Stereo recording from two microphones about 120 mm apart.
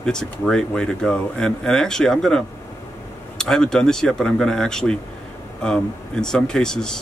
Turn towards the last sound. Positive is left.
turn(degrees=5)  # may be behind; listen again after turning